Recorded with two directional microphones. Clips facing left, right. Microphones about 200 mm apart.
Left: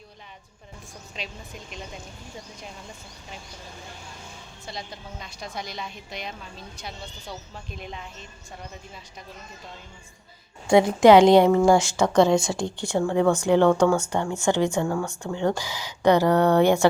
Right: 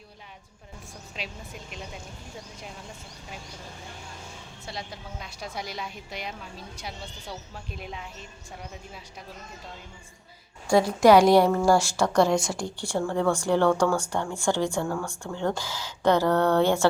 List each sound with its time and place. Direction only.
1.1 s speech: 5° right (ahead or behind)
4.6 s a woman's voice: 5° right (ahead or behind)
10.7 s a woman's voice: 20° left (ahead or behind)